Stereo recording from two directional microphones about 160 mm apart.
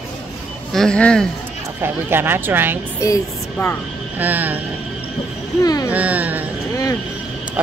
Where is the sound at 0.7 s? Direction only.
5° left (ahead or behind).